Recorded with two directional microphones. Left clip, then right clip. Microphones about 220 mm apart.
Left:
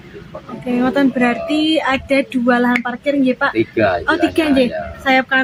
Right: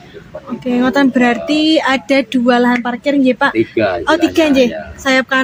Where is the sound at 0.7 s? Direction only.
45° right (ahead or behind).